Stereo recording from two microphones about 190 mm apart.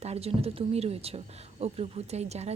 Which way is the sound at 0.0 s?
30° right (ahead or behind).